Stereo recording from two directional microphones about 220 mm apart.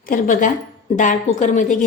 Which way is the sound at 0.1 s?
40° left (ahead or behind).